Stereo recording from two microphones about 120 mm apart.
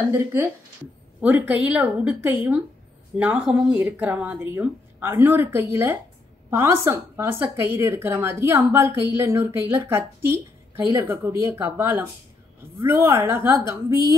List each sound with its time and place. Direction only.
0.1 s a woman's voice: 20° right (ahead or behind)